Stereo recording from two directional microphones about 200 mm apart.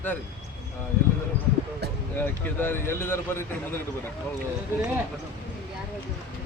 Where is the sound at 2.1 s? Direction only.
10° left (ahead or behind).